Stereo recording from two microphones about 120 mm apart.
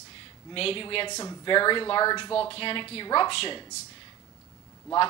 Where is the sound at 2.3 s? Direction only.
50° left (ahead or behind).